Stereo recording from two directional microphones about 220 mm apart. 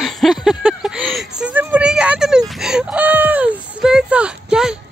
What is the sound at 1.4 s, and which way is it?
Chicken, 5° right (ahead or behind).